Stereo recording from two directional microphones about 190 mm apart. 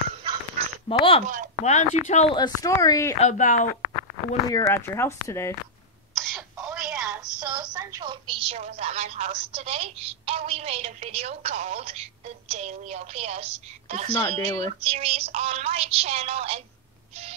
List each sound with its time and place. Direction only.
0.8 s speech: 30° left (ahead or behind)
1.2 s speech: 45° right (ahead or behind)
1.6 s speech: 35° left (ahead or behind)
2.3 s speech: 20° left (ahead or behind)
3.2 s speech: 40° left (ahead or behind)
4.5 s speech: 15° left (ahead or behind)
6.1 s a sound: centre (ahead or behind)
6.7 s telephone: 5° right (ahead or behind)
7.3 s a sound: 20° right (ahead or behind)
8.5 s speech: 35° right (ahead or behind)